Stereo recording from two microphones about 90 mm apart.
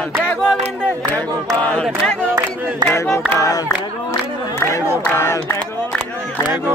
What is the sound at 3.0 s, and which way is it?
Choir, 35° left (ahead or behind).